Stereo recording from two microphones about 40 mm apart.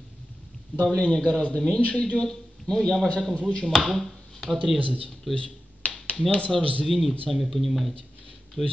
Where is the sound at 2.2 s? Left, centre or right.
Centre.